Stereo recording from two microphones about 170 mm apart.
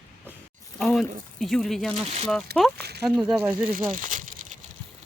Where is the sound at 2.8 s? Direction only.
70° right (ahead or behind).